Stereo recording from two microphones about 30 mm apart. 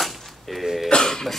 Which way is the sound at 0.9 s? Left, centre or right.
Left.